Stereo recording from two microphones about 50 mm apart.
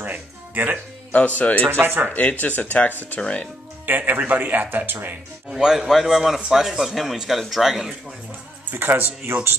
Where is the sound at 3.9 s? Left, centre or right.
Right.